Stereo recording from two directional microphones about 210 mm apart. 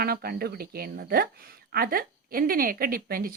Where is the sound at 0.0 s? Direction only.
45° right (ahead or behind).